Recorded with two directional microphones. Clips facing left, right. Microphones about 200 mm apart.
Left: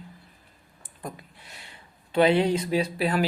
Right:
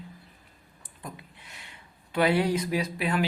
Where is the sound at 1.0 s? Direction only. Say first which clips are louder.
Left 4 dB; 35° left (ahead or behind).